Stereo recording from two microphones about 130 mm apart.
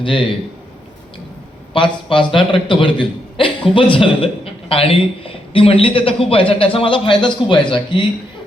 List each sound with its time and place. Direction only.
0.0 s a man's voice: 40° left (ahead or behind)
1.7 s a man's voice: 40° left (ahead or behind)